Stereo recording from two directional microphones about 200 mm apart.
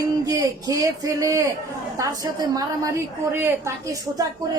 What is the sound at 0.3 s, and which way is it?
Speech, 15° right (ahead or behind).